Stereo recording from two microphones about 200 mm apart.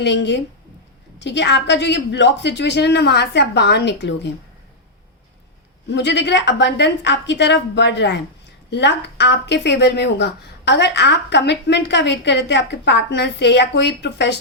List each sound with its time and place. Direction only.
0.0 s speech: 60° left (ahead or behind)
5.9 s speech: 60° left (ahead or behind)